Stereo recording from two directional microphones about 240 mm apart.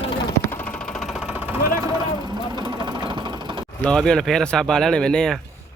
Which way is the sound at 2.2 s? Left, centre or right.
Centre.